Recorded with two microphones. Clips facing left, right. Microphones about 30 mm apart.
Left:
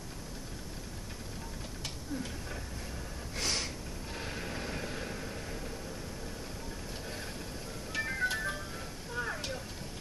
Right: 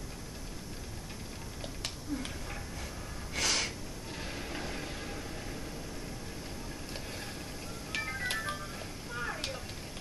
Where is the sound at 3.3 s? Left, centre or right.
Right.